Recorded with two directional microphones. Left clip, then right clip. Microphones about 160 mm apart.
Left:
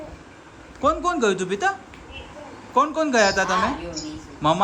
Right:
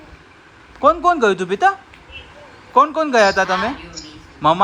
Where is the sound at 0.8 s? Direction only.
Centre (ahead or behind).